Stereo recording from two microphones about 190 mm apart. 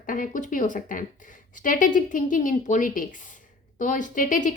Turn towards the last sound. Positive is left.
turn(degrees=45)  # may be behind; listen again after turning